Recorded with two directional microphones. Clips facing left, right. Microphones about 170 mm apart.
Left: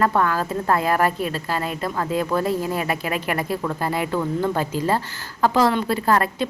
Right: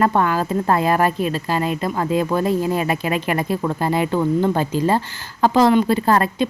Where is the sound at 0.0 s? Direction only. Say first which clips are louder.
Right 2 dB; 20° right (ahead or behind).